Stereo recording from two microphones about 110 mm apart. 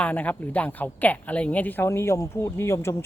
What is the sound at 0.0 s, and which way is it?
Speech, 15° left (ahead or behind).